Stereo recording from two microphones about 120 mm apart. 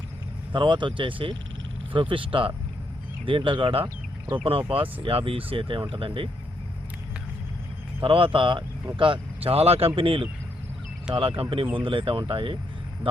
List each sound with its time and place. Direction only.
0.5 s speech: 40° right (ahead or behind)
8.0 s speech: 50° right (ahead or behind)